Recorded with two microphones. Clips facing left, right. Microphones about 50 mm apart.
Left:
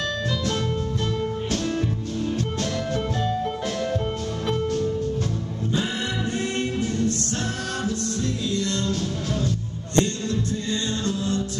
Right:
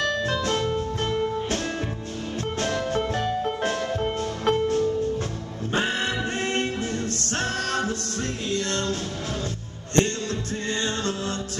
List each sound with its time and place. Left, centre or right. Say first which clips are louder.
3.2 s music: even; right
6.3 s a capella: even; right
7.8 s music: left 2 dB; right
9.9 s music: left 1 dB; right